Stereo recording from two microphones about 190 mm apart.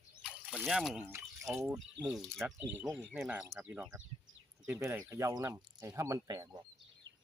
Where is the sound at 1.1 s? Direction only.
15° right (ahead or behind).